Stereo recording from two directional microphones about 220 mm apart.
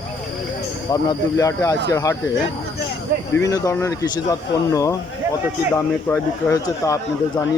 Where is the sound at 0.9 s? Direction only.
15° left (ahead or behind).